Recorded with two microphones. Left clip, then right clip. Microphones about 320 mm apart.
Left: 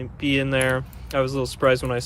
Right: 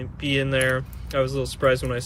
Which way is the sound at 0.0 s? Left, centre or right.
Centre.